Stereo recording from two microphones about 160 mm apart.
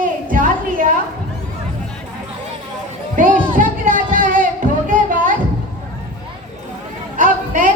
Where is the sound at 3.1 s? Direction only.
55° right (ahead or behind).